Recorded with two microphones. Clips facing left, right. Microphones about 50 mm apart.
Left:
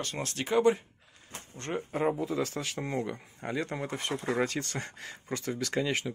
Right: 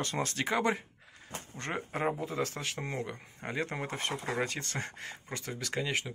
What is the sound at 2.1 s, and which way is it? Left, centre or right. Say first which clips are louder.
Speech: left 3 dB; right.